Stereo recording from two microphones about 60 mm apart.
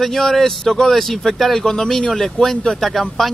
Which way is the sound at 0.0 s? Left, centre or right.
Centre.